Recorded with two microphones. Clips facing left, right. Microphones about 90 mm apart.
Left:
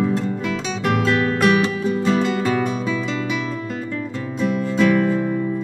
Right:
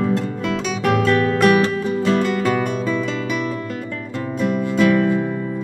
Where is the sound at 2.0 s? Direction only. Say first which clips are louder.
Right 1 dB; 60° right (ahead or behind).